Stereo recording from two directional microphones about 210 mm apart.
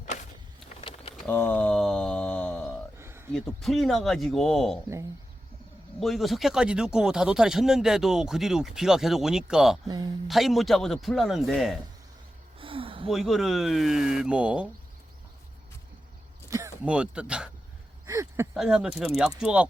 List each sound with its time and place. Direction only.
0.8 s bird: 25° left (ahead or behind)
1.1 s a sound: 10° left (ahead or behind)
3.0 s a sound: 10° right (ahead or behind)
3.3 s speech: centre (ahead or behind)
6.0 s speech: centre (ahead or behind)
9.8 s speech: 20° right (ahead or behind)
10.2 s speech: centre (ahead or behind)
12.5 s a sound: 25° right (ahead or behind)
13.1 s speech: centre (ahead or behind)
16.5 s speech: 15° right (ahead or behind)
18.0 s a sound: 15° right (ahead or behind)
18.5 s speech: 5° right (ahead or behind)